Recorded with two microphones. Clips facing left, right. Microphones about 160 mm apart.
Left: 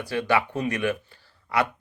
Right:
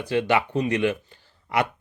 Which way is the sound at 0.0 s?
20° right (ahead or behind).